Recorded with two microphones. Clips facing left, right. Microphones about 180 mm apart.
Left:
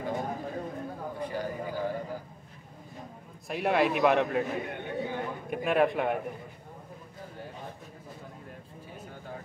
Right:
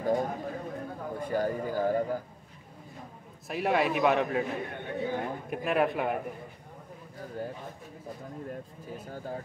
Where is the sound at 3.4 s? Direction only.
Centre (ahead or behind).